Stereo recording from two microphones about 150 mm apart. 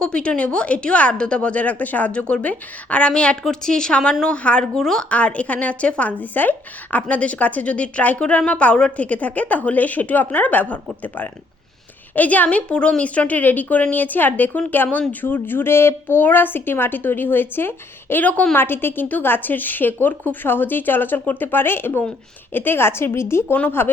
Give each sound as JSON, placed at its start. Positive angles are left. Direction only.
{"t": 0.0, "sound": "a woman's voice", "side_deg": 5}